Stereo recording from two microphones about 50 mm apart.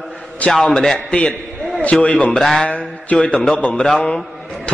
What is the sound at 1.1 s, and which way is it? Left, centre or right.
A man's voice, left.